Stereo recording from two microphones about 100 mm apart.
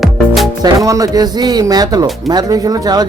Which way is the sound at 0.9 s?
35° right (ahead or behind).